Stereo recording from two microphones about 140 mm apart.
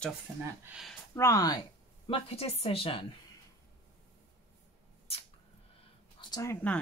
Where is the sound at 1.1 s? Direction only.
25° left (ahead or behind); by 3.1 s 40° left (ahead or behind).